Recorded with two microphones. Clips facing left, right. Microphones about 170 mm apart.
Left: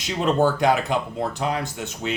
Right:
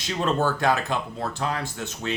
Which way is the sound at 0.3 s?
15° left (ahead or behind).